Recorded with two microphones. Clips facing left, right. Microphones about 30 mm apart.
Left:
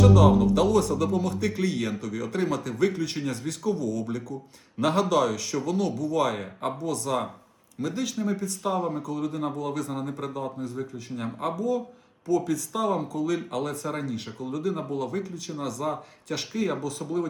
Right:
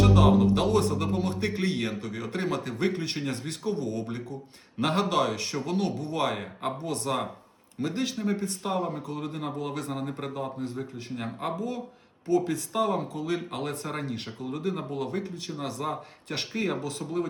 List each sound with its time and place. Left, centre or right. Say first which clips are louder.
0.0 s a man's voice: left 2 dB; right
6.4 s a man's voice: left 1 dB; centre
6.7 s a man's voice: left 3 dB; right
9.9 s a man's voice: left 1 dB; right
11.5 s a man's voice: left 6 dB; right